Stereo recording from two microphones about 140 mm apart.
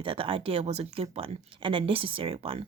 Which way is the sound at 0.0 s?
40° right (ahead or behind).